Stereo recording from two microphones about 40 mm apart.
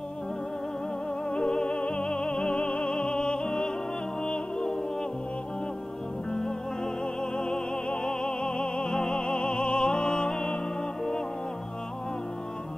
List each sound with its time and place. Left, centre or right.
1.3 s music: left
6.3 s music: centre